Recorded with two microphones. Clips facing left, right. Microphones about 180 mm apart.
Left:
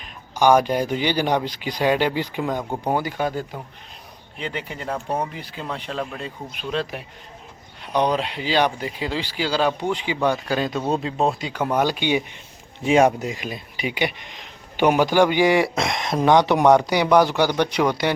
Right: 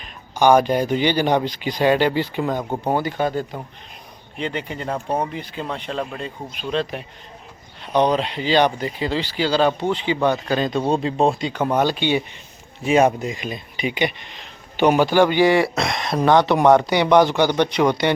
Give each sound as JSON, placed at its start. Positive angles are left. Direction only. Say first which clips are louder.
{"t": 0.3, "sound": "speech", "louder": "right 2 dB", "side_deg": 10}
{"t": 2.6, "sound": "speech", "louder": "right 2 dB", "side_deg": -10}
{"t": 2.9, "sound": "a man's voice", "louder": "right 2 dB", "side_deg": 10}
{"t": 8.0, "sound": "speech", "louder": "right 3 dB", "side_deg": 10}
{"t": 10.8, "sound": "speech", "louder": "right 3 dB", "side_deg": -30}
{"t": 11.0, "sound": "speech", "louder": "right 3 dB", "side_deg": 5}